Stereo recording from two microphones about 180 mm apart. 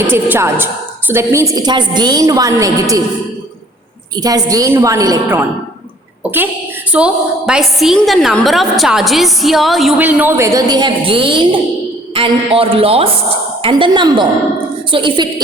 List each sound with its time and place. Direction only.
0.1 s a woman's voice: 15° right (ahead or behind)
4.1 s a woman's voice: 20° right (ahead or behind)
6.9 s a woman's voice: 5° right (ahead or behind); by 15.3 s 25° right (ahead or behind)